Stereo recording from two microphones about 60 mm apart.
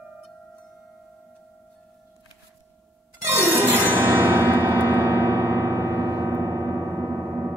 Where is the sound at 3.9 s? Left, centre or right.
Right.